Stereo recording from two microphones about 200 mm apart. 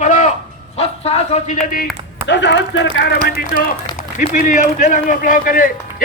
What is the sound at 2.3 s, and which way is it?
A man's voice, 60° left (ahead or behind).